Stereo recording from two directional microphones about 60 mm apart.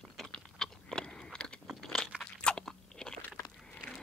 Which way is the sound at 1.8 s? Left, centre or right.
Centre.